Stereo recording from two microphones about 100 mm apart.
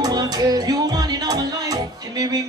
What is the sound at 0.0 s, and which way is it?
Music, 40° right (ahead or behind).